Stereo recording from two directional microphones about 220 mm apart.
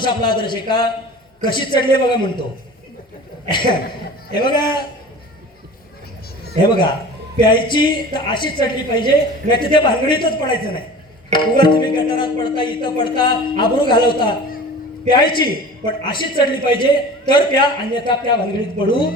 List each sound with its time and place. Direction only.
0.0 s a woman's voice: 20° left (ahead or behind)
4.4 s a woman's voice: 20° left (ahead or behind)
6.6 s a woman's voice: 20° left (ahead or behind)